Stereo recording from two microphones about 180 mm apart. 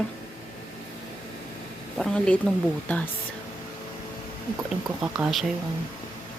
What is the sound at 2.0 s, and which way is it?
Speech, 5° left (ahead or behind).